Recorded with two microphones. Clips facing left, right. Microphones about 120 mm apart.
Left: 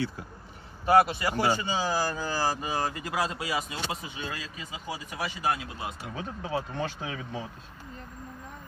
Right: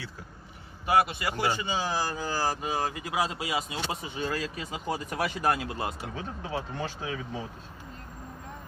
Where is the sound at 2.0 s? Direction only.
15° right (ahead or behind).